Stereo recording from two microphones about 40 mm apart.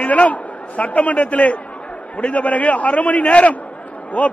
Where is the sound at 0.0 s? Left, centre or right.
Left.